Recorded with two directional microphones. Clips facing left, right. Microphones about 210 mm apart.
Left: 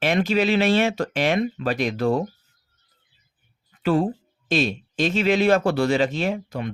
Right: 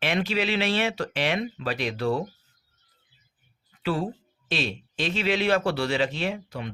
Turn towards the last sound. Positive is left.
turn(degrees=45)  # may be behind; listen again after turning